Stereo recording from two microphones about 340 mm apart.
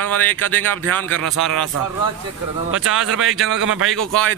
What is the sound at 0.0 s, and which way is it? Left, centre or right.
Speech, centre.